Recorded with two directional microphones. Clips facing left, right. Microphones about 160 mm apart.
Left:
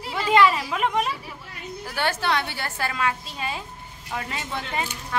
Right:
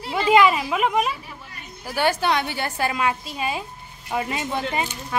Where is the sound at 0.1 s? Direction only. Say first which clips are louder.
Right 2 dB; 15° right (ahead or behind).